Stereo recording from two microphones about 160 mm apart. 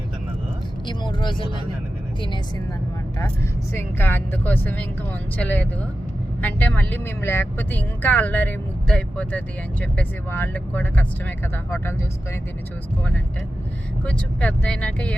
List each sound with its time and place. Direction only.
0.9 s speech: 30° left (ahead or behind)
3.7 s speech: 15° left (ahead or behind)
14.0 s speech: 10° left (ahead or behind)